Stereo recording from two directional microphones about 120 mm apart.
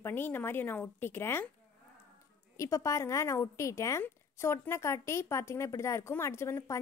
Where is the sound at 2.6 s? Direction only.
25° left (ahead or behind).